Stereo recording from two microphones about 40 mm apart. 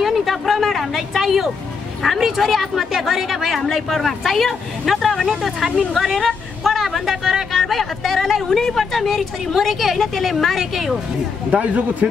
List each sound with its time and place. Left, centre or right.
0.0 s a sound: centre
2.1 s a woman's voice: centre
3.5 s a woman's voice: centre
9.0 s a woman's voice: centre
11.5 s a man's voice: right